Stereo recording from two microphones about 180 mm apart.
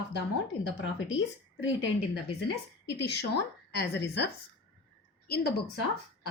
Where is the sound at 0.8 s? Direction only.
90° left.